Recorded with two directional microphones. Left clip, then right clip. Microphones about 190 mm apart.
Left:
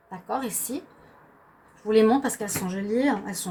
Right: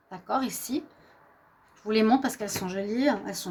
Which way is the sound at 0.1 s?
60° right (ahead or behind).